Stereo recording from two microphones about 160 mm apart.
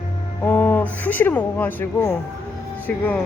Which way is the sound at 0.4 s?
10° left (ahead or behind).